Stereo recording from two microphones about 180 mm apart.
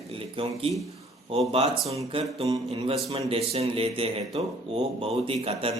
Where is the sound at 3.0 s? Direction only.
35° right (ahead or behind).